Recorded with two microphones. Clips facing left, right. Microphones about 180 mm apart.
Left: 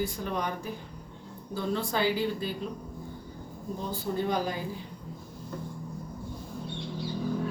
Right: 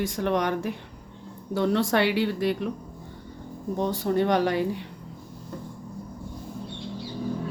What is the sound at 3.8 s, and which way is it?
Speech, 70° right (ahead or behind).